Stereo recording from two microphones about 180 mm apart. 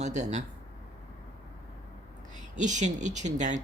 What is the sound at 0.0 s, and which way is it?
Speech, 40° right (ahead or behind).